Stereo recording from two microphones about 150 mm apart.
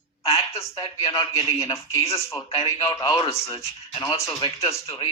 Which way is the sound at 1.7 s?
20° left (ahead or behind).